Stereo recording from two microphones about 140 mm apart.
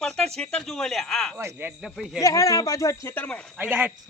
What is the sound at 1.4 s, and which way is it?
Speech, 15° right (ahead or behind).